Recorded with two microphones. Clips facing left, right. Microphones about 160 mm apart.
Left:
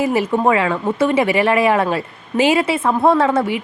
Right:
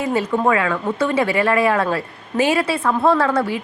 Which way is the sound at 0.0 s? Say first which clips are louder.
Left 2 dB; 25° left (ahead or behind).